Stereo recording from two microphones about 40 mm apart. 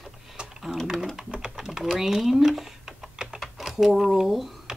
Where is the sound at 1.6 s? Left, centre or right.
Centre.